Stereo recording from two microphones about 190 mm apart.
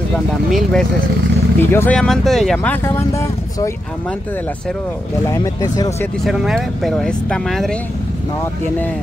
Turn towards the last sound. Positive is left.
turn(degrees=0)  # may be behind; listen again after turning